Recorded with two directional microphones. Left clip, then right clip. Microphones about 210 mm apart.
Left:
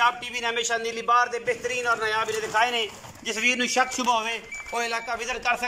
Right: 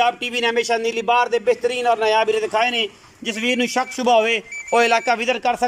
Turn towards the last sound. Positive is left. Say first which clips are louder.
# right 7 dB
turn(degrees=-40)  # may be behind; listen again after turning